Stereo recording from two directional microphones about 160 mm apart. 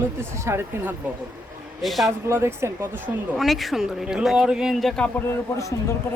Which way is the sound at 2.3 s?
15° right (ahead or behind).